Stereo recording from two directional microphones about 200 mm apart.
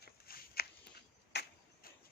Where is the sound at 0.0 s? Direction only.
50° left (ahead or behind).